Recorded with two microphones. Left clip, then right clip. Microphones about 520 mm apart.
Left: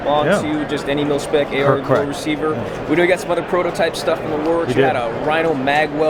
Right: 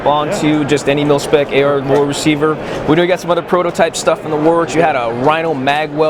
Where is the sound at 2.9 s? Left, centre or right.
Right.